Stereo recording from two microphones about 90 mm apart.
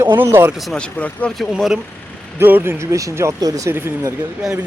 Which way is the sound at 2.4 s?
25° right (ahead or behind).